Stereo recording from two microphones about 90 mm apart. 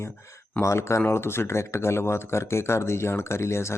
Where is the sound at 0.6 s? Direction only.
30° left (ahead or behind).